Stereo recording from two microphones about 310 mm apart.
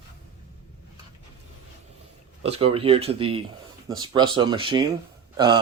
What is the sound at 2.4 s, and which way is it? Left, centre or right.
Speech, centre.